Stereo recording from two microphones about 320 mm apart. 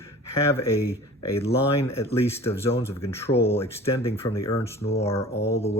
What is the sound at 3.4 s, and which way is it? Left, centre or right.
Speech, centre.